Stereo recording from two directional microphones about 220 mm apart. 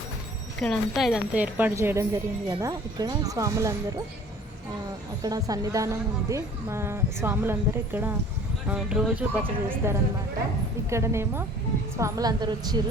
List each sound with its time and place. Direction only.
0.6 s a woman's voice: centre (ahead or behind); by 4.0 s 15° right (ahead or behind)
5.2 s a woman's voice: 15° right (ahead or behind)